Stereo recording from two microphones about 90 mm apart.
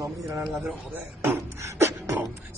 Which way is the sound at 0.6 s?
25° right (ahead or behind).